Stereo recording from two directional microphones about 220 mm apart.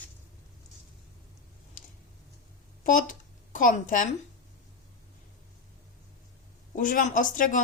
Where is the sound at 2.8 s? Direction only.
35° left (ahead or behind).